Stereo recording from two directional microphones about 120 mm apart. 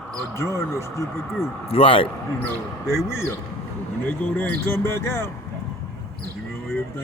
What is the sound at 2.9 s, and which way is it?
Speech, 20° left (ahead or behind).